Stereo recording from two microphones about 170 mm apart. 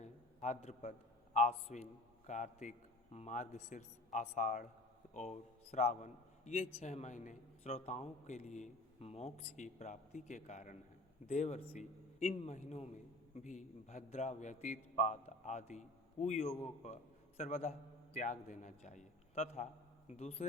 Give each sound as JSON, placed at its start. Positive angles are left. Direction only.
{"t": 0.0, "sound": "a man's voice", "side_deg": 45}